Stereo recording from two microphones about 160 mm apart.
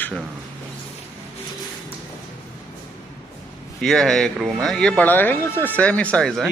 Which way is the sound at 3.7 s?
Centre (ahead or behind).